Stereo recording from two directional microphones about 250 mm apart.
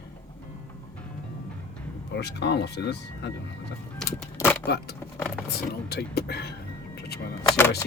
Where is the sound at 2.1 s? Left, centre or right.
Left.